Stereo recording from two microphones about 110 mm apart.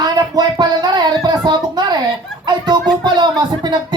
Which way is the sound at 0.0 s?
40° right (ahead or behind).